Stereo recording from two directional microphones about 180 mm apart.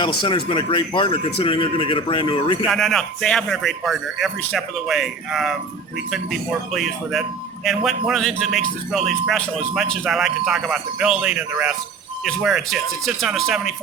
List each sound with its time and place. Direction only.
0.2 s speech: 25° left (ahead or behind)
2.6 s speech: centre (ahead or behind)